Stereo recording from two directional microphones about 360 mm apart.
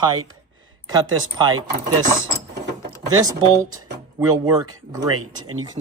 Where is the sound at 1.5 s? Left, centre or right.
Right.